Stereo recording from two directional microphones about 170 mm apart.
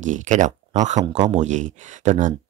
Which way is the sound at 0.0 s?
45° right (ahead or behind).